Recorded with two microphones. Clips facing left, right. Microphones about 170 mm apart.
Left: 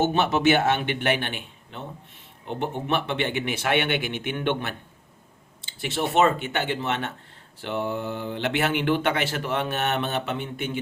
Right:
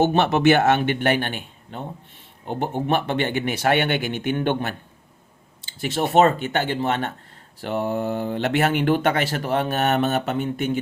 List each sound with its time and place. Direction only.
0.2 s speech: 55° right (ahead or behind)